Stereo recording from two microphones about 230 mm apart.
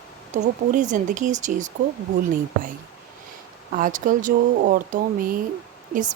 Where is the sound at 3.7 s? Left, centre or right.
Right.